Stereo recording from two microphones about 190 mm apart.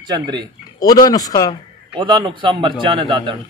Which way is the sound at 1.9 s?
25° right (ahead or behind).